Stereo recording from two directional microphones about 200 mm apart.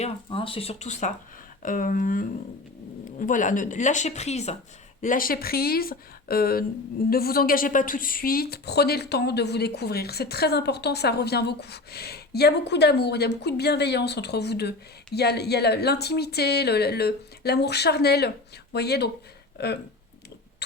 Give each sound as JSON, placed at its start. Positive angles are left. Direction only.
{"t": 0.0, "sound": "speech", "side_deg": 25}
{"t": 5.0, "sound": "a woman's voice", "side_deg": 45}